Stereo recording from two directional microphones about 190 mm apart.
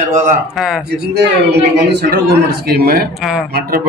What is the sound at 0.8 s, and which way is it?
A man's voice, 60° right (ahead or behind).